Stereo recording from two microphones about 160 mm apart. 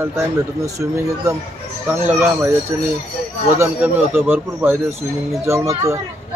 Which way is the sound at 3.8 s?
10° right (ahead or behind).